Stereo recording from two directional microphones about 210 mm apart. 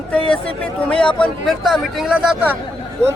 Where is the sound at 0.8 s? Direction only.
5° left (ahead or behind).